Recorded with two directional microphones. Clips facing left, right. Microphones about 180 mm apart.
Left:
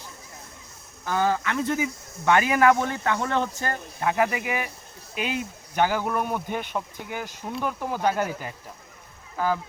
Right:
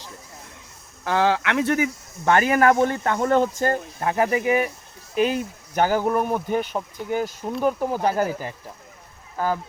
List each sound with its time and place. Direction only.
1.0 s speech: 80° right
2.2 s speech: 45° right (ahead or behind)